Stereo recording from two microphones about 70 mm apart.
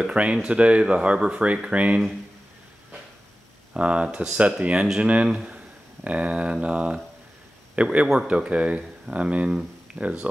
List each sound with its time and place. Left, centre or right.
0.0 s speech: centre
3.7 s speech: centre